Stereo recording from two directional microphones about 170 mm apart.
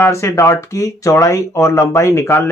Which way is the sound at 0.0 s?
15° left (ahead or behind).